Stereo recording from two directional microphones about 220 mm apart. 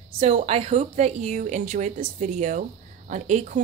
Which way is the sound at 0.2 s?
30° right (ahead or behind).